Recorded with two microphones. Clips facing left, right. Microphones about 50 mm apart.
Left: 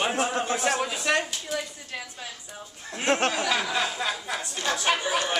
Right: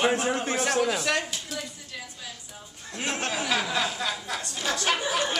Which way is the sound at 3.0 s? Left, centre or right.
Left.